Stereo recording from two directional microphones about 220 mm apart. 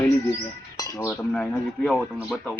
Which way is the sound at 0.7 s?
15° left (ahead or behind).